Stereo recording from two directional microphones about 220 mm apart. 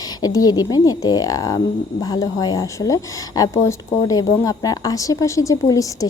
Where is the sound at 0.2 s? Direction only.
15° left (ahead or behind).